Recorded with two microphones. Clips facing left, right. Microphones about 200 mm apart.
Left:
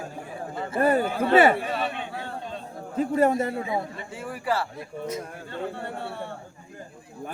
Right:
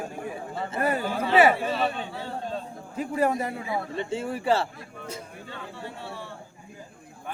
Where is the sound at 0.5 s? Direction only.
35° right (ahead or behind).